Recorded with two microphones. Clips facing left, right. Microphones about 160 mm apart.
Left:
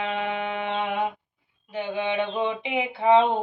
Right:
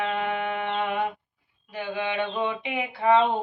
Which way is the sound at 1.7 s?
25° left (ahead or behind).